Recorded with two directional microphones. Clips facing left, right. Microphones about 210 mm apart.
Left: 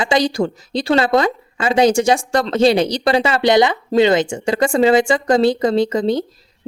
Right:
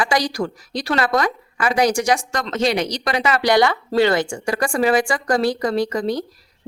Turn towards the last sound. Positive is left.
turn(degrees=25)  # may be behind; listen again after turning